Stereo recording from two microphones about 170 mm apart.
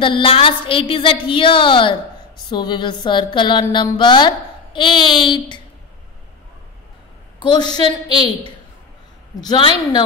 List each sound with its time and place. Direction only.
0.0 s a woman's voice: 30° left (ahead or behind)
7.4 s speech: 25° left (ahead or behind)
9.3 s speech: 25° left (ahead or behind)